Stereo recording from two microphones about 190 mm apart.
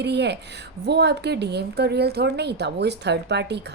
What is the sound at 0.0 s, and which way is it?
Speech, 60° right (ahead or behind).